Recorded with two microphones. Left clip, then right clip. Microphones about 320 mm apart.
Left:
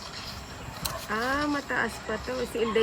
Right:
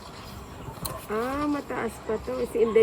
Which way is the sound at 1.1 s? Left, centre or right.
Left.